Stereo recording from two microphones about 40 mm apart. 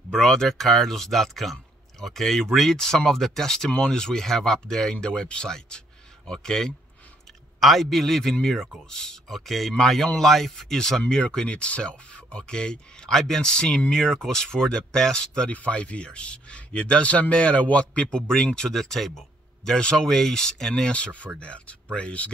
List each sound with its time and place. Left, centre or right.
0.1 s speech: centre
9.3 s speech: centre
11.4 s speech: left
15.5 s speech: left
18.3 s speech: centre
18.7 s speech: centre
21.4 s speech: left